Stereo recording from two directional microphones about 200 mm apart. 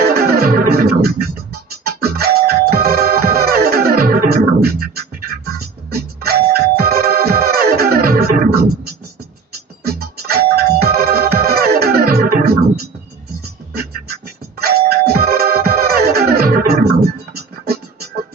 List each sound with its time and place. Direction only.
0.1 s music: 50° right (ahead or behind)
14.6 s music: 50° right (ahead or behind)